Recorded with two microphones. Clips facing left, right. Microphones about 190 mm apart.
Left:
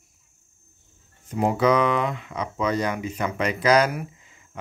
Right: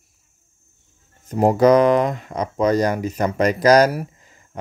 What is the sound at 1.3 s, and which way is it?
Speech, 40° right (ahead or behind).